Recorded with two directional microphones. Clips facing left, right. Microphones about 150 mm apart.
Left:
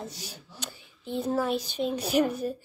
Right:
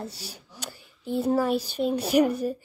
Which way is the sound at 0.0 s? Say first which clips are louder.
Right 2 dB; 10° right (ahead or behind).